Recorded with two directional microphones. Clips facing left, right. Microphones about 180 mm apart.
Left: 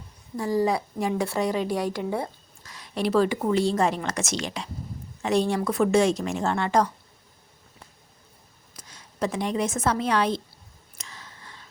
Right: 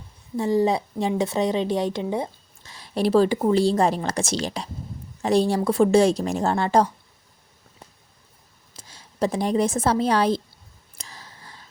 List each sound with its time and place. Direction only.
0.3 s a woman's voice: 25° right (ahead or behind)
2.7 s speech: 35° right (ahead or behind)
8.7 s a woman's voice: 30° right (ahead or behind)
10.9 s a sound: 35° right (ahead or behind)